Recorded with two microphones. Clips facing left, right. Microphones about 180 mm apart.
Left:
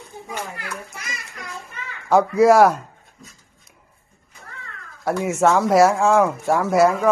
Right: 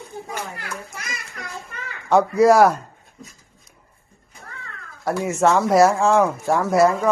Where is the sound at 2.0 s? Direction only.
Centre (ahead or behind).